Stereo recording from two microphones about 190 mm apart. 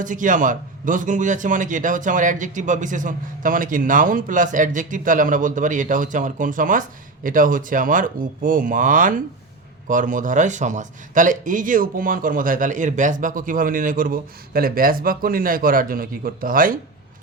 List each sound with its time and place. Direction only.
0.0 s a man's voice: 45° right (ahead or behind)